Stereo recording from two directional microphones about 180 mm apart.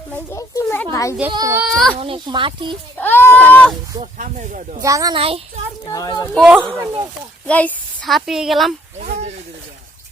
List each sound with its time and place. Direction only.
0.1 s a child's voice: 15° left (ahead or behind)
1.3 s speech: 20° right (ahead or behind)
1.5 s speech: centre (ahead or behind)
2.0 s speech: 30° right (ahead or behind)
3.0 s a sound: 10° left (ahead or behind)
4.0 s speech: 45° right (ahead or behind)
4.8 s a child's voice: 20° right (ahead or behind)
5.1 s a child's voice: 30° right (ahead or behind)
5.8 s speech: 20° left (ahead or behind)
6.3 s speech: centre (ahead or behind)
6.7 s speech: 20° right (ahead or behind)
7.4 s a woman's voice: 5° left (ahead or behind)
9.0 s sizzle: 40° right (ahead or behind)